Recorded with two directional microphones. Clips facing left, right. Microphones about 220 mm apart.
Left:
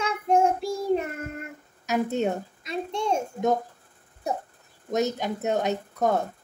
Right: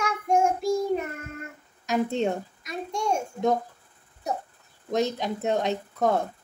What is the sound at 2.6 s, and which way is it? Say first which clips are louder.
Child singing: left 2 dB; 25° left (ahead or behind).